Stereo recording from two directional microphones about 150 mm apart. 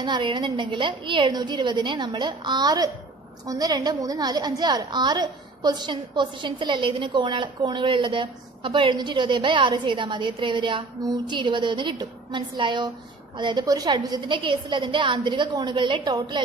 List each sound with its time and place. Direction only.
0.0 s a woman's voice: 30° right (ahead or behind)